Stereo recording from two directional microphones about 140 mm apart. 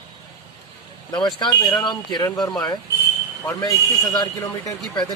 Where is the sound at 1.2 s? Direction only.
25° left (ahead or behind).